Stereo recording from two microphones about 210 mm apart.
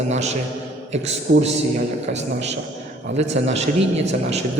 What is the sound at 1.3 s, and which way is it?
Speech, 50° right (ahead or behind).